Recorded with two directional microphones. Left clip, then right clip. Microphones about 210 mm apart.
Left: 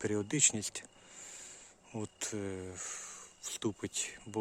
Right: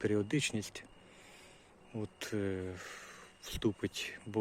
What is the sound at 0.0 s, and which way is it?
Speech, 15° left (ahead or behind).